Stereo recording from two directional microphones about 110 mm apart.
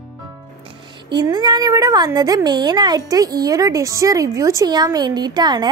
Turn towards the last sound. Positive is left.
turn(degrees=-40)  # may be behind; listen again after turning